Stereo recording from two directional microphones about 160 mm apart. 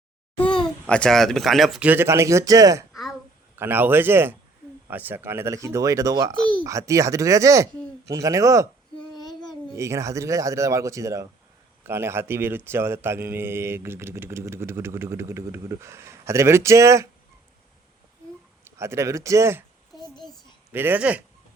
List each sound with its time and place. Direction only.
0.9 s speech: 5° left (ahead or behind)
1.9 s a man's voice: 15° right (ahead or behind)
2.9 s a sound: centre (ahead or behind)
3.5 s a man's voice: 15° right (ahead or behind)
9.7 s a man's voice: 20° right (ahead or behind)
18.8 s a man's voice: 15° right (ahead or behind)
20.0 s a sound: 25° left (ahead or behind)
20.7 s a man's voice: 10° right (ahead or behind)